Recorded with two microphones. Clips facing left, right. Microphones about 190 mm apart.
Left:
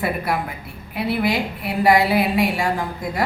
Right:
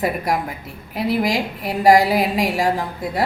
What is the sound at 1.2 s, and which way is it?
A woman's voice, 45° right (ahead or behind).